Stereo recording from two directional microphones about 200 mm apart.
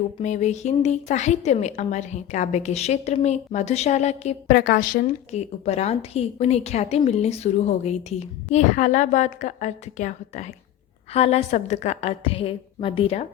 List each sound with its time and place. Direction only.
0.2 s a woman's voice: 35° left (ahead or behind)
4.4 s a woman's voice: 45° left (ahead or behind); by 13.2 s 30° left (ahead or behind)